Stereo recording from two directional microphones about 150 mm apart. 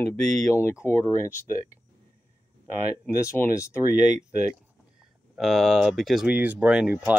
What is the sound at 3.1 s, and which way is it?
Speech, 15° left (ahead or behind).